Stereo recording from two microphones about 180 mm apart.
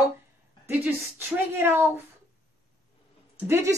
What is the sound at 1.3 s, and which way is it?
Speech, 10° right (ahead or behind).